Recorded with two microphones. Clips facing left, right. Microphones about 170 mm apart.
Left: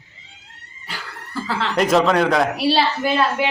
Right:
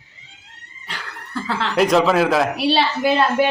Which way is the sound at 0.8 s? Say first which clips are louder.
Even; 5° left (ahead or behind).